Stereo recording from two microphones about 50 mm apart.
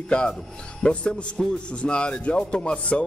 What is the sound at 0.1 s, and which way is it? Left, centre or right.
Speech, left.